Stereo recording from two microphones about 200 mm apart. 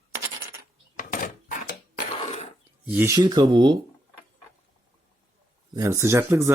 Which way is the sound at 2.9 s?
10° right (ahead or behind).